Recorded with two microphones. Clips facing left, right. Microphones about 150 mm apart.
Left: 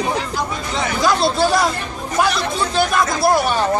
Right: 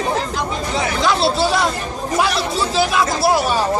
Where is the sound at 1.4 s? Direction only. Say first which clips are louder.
Left 1 dB; centre (ahead or behind).